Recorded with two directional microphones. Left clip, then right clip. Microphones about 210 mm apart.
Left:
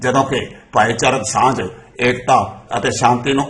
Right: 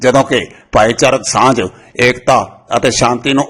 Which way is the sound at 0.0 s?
45° right (ahead or behind).